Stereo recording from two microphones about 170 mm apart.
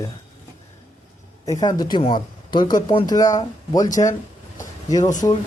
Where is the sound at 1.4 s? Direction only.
20° left (ahead or behind).